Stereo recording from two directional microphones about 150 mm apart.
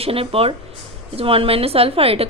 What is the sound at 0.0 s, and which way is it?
A woman's voice, 40° right (ahead or behind).